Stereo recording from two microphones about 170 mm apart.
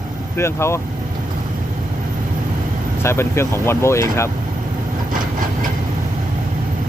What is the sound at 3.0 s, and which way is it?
Speech, 15° left (ahead or behind).